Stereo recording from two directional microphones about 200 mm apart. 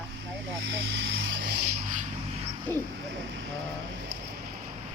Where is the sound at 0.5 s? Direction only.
70° right (ahead or behind).